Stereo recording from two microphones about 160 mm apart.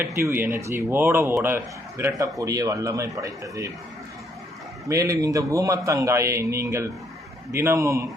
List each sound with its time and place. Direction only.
0.0 s a man's voice: 15° right (ahead or behind)
4.9 s a man's voice: 20° right (ahead or behind)